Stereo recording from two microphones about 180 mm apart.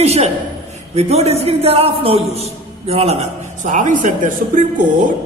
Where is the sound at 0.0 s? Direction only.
35° right (ahead or behind).